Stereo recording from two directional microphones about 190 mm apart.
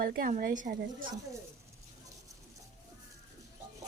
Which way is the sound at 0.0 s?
50° right (ahead or behind).